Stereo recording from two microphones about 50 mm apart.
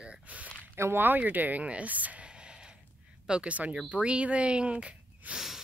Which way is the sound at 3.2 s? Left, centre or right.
Centre.